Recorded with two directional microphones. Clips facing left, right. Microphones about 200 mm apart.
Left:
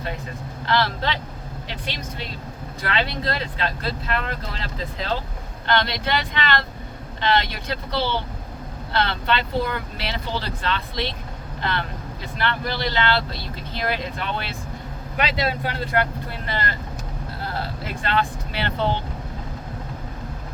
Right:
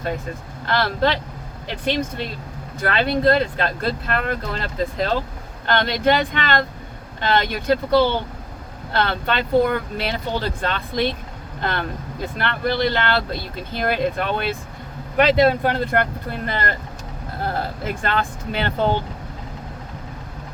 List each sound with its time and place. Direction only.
0.6 s speech: 50° right (ahead or behind)